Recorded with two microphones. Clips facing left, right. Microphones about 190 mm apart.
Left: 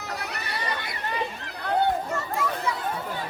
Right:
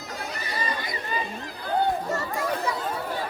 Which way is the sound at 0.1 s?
65° left (ahead or behind).